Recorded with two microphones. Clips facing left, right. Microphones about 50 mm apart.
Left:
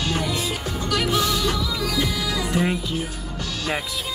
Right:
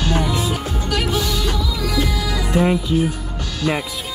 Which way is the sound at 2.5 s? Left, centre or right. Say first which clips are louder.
Right 8 dB; centre.